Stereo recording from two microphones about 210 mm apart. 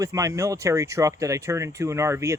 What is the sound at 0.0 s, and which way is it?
Speech, 15° right (ahead or behind).